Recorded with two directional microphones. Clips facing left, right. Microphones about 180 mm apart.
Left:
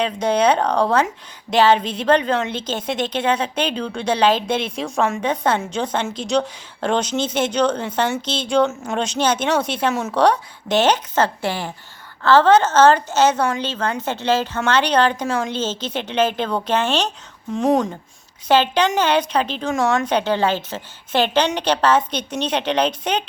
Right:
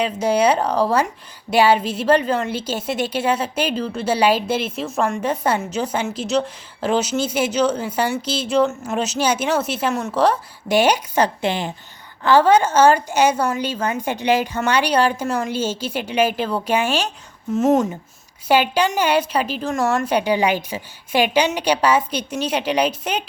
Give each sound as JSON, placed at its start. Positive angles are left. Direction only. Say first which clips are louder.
{"t": 0.0, "sound": "speech", "louder": "even", "side_deg": -10}